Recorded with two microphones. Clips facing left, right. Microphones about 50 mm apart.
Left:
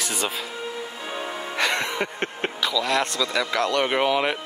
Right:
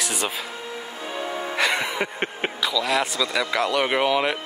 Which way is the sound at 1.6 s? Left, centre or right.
Centre.